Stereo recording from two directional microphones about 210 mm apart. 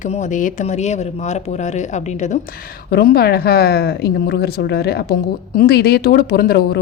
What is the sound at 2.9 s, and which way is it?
A woman's voice, 45° left (ahead or behind).